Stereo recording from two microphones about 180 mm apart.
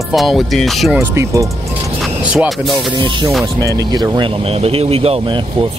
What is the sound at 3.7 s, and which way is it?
Speech, 20° right (ahead or behind).